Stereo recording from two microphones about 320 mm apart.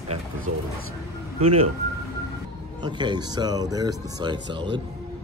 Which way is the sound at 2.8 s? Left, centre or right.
Centre.